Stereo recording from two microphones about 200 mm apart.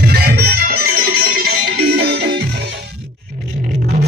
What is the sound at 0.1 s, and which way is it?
Music, 50° right (ahead or behind).